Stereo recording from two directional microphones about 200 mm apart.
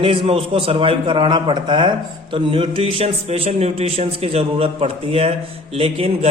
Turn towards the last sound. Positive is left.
turn(degrees=-30)  # may be behind; listen again after turning